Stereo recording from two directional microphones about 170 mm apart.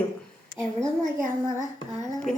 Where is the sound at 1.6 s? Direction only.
45° right (ahead or behind).